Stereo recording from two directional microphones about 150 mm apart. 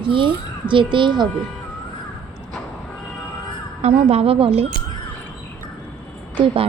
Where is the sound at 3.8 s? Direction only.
40° right (ahead or behind).